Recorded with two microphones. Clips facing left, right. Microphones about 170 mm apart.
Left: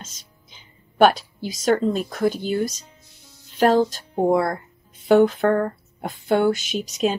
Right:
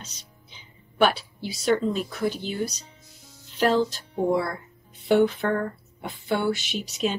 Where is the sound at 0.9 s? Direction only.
45° left (ahead or behind).